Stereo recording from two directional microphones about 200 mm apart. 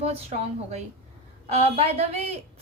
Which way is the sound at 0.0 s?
30° right (ahead or behind).